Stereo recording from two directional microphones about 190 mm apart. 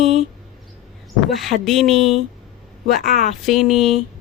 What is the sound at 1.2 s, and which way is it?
Speech, centre (ahead or behind).